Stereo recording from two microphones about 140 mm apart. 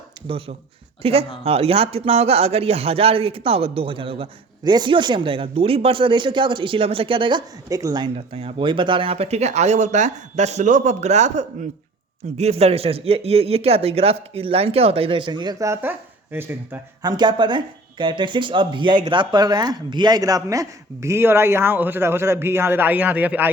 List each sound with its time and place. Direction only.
0.3 s a man's voice: 40° right (ahead or behind); by 8.1 s 25° right (ahead or behind)
8.1 s a man's voice: 45° right (ahead or behind); by 16.8 s 15° right (ahead or behind)
17.0 s speech: 30° right (ahead or behind); by 23.5 s 10° right (ahead or behind)